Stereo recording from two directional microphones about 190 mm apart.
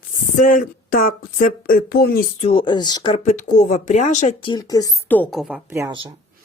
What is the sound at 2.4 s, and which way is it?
Speech, 30° left (ahead or behind).